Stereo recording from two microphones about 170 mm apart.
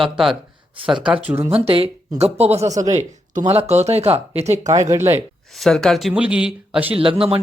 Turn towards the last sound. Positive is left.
turn(degrees=-35)  # may be behind; listen again after turning